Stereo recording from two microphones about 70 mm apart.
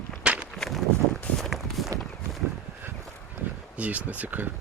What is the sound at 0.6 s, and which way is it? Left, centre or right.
Walk, centre.